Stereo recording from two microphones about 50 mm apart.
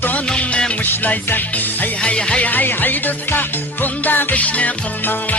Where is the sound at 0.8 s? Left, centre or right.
Left.